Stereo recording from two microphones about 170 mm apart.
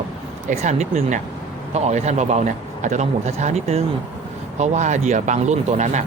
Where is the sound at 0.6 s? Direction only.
45° right (ahead or behind).